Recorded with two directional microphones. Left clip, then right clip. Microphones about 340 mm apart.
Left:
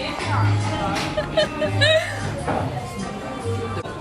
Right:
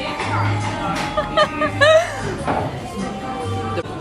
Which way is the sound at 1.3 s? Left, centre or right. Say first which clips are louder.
Right 4 dB; centre.